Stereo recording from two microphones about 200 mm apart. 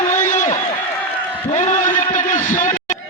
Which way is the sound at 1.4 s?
35° left (ahead or behind).